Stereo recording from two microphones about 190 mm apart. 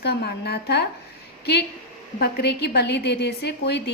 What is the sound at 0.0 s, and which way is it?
Speech, 60° left (ahead or behind).